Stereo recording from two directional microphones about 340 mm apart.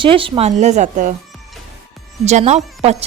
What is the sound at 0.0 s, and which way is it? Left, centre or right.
A woman's voice, centre.